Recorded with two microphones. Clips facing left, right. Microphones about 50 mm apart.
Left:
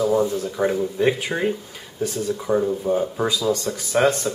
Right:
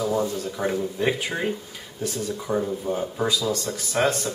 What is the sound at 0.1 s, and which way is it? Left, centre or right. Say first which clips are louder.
Speech: left 5 dB; centre.